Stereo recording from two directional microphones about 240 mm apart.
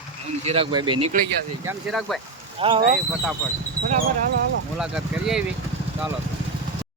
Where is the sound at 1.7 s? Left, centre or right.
Centre.